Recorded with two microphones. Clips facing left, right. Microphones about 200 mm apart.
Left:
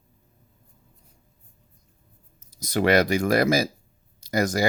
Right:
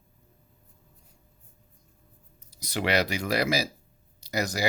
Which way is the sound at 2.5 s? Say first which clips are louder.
Left 7 dB; 45° left (ahead or behind).